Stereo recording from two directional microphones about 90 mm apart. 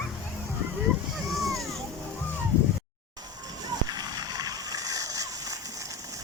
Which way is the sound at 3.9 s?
45° right (ahead or behind).